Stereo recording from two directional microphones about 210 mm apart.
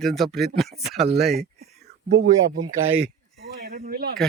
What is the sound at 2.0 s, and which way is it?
Speech, 50° right (ahead or behind).